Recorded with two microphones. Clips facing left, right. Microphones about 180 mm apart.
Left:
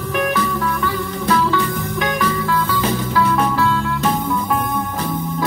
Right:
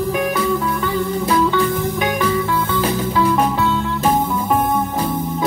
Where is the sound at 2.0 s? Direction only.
25° right (ahead or behind).